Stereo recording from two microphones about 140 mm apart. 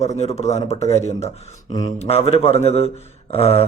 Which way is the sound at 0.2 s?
50° left (ahead or behind).